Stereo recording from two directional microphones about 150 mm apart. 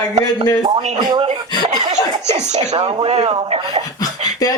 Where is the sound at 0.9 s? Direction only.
30° right (ahead or behind).